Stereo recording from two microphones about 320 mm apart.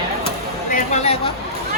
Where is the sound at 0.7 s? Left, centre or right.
Left.